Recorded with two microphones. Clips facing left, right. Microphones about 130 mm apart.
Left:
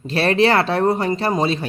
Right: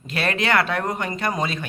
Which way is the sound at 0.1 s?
30° left (ahead or behind).